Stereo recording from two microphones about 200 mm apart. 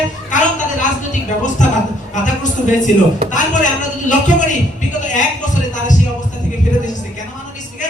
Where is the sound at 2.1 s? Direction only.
40° left (ahead or behind).